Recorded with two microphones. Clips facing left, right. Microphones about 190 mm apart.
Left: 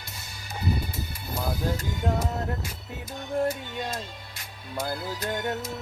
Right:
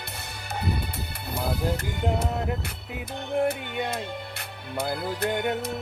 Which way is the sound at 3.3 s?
60° right (ahead or behind).